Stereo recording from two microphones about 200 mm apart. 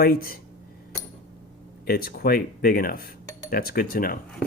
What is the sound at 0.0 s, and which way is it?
Speech, 50° left (ahead or behind).